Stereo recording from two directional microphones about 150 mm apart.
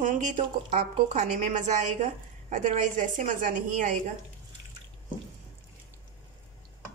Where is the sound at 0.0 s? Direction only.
60° right (ahead or behind).